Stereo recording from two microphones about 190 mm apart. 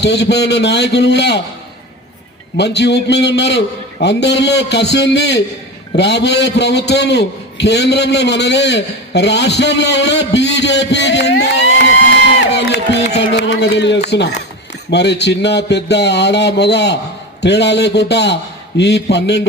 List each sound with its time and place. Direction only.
0.0 s a man's voice: 60° left (ahead or behind)
2.6 s a man's voice: 60° left (ahead or behind)
12.5 s a sound: 60° left (ahead or behind)
14.8 s a man's voice: 60° left (ahead or behind)